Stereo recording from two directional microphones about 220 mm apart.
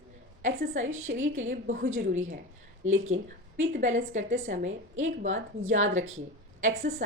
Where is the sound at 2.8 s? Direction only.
65° right (ahead or behind).